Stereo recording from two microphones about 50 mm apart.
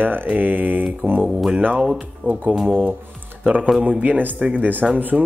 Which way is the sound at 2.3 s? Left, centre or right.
Right.